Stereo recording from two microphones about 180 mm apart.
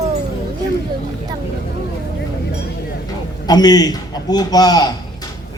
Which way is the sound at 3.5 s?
20° left (ahead or behind).